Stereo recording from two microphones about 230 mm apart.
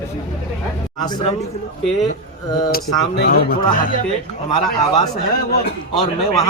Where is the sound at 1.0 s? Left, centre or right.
Centre.